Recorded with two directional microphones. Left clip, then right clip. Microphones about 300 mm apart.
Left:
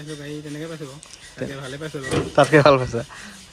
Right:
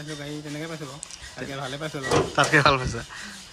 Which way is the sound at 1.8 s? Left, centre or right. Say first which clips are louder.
Right 1 dB; centre.